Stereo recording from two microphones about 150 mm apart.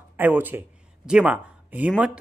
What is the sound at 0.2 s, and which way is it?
Speech, 10° right (ahead or behind).